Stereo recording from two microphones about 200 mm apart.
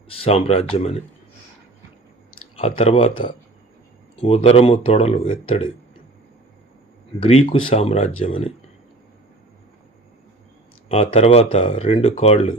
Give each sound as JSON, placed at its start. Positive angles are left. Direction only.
{"t": 0.1, "sound": "speech", "side_deg": 30}
{"t": 2.6, "sound": "speech", "side_deg": 30}
{"t": 7.2, "sound": "speech", "side_deg": 30}
{"t": 10.8, "sound": "speech", "side_deg": 30}